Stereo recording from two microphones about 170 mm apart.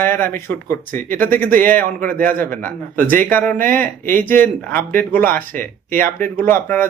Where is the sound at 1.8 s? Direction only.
55° right (ahead or behind).